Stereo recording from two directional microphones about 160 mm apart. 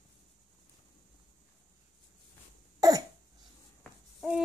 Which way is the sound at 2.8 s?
25° right (ahead or behind).